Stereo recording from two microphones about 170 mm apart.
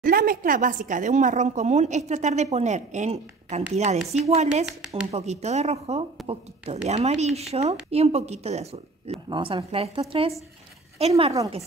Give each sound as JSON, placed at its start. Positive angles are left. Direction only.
{"t": 0.0, "sound": "a woman's voice", "side_deg": -55}